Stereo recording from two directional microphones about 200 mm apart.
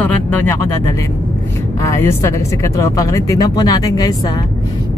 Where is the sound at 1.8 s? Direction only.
15° left (ahead or behind).